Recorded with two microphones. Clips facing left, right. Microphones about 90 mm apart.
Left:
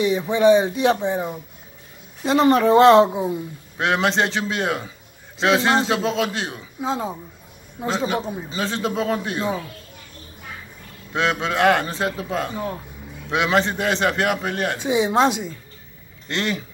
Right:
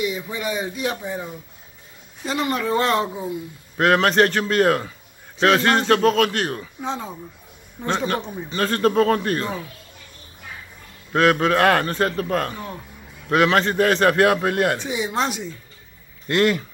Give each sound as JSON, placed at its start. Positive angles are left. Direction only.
{"t": 0.0, "sound": "speech", "side_deg": 30}
{"t": 3.7, "sound": "a man's voice", "side_deg": 0}
{"t": 8.6, "sound": "a man's voice", "side_deg": 5}
{"t": 11.1, "sound": "a man's voice", "side_deg": 0}
{"t": 14.8, "sound": "speech", "side_deg": 20}
{"t": 16.3, "sound": "a man's voice", "side_deg": -5}